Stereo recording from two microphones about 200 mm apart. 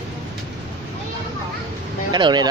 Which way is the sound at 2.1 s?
20° right (ahead or behind).